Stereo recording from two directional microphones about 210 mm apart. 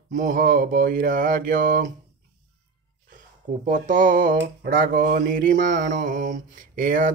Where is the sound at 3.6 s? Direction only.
40° right (ahead or behind).